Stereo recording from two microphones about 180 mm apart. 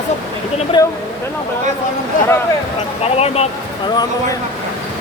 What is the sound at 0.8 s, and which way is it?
Speech, 20° left (ahead or behind).